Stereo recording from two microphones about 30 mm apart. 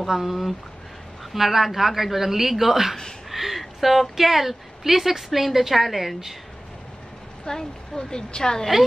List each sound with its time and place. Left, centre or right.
0.0 s a woman's voice: centre
7.4 s speech: left